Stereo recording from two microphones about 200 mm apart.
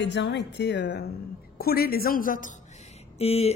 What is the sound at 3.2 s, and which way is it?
Speech, 30° left (ahead or behind).